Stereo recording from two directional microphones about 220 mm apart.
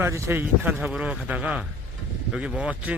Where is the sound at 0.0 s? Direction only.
10° right (ahead or behind).